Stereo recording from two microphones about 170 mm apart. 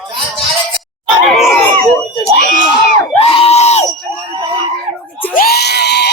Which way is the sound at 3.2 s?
35° left (ahead or behind).